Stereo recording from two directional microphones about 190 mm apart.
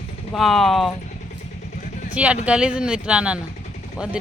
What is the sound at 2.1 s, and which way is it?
Speech, 5° right (ahead or behind).